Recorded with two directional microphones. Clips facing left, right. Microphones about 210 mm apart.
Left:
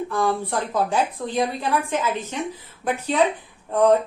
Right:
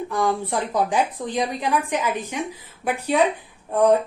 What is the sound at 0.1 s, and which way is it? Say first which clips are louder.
A woman's voice: right 2 dB; 15° right (ahead or behind).